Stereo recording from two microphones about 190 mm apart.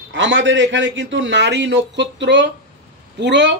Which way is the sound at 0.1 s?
75° right (ahead or behind).